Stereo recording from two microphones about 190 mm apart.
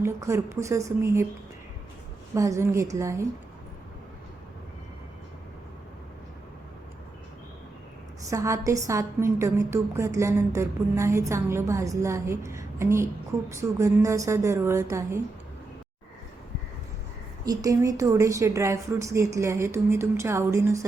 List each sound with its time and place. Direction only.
0.0 s a woman's voice: 15° right (ahead or behind)
2.3 s a woman's voice: 15° right (ahead or behind)
8.3 s a woman's voice: 15° right (ahead or behind)
17.4 s a woman's voice: 20° right (ahead or behind)